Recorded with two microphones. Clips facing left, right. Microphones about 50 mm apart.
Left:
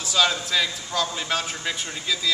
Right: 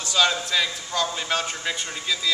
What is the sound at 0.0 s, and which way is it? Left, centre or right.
A man's voice, centre.